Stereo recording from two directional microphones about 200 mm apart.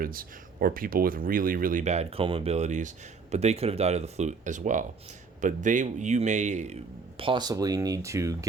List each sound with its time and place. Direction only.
0.0 s speech: 45° right (ahead or behind)
7.2 s speech: 25° right (ahead or behind)